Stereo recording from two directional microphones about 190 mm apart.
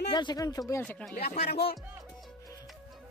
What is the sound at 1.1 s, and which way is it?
Speech, 55° left (ahead or behind).